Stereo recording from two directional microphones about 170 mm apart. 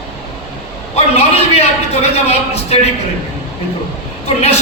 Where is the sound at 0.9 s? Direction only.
35° left (ahead or behind).